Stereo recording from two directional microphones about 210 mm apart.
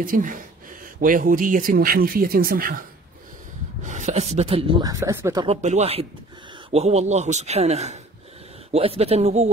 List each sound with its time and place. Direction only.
0.0 s speech: 40° right (ahead or behind)
3.8 s speech: 35° right (ahead or behind)
5.6 s speech: 35° right (ahead or behind)